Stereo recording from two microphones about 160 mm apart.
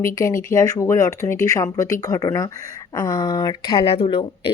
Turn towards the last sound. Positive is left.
turn(degrees=35)  # may be behind; listen again after turning